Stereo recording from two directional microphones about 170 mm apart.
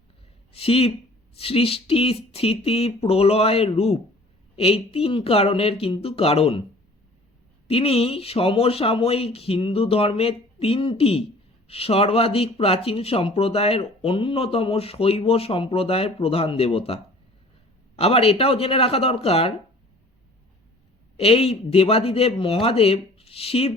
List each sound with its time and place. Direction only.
0.5 s speech: 35° left (ahead or behind)
7.7 s speech: 35° left (ahead or behind)
21.2 s speech: 35° left (ahead or behind)